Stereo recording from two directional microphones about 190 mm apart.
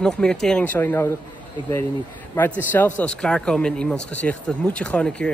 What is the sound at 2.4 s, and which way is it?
Speech, 10° left (ahead or behind).